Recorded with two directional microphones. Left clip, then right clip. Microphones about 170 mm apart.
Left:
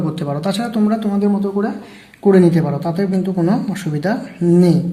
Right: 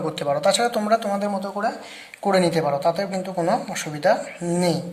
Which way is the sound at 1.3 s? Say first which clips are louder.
Left 6 dB; 35° right (ahead or behind).